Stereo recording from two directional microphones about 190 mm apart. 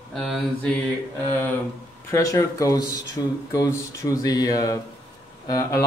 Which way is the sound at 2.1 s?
15° left (ahead or behind).